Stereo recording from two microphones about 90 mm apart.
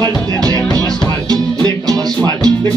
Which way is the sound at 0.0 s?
50° right (ahead or behind).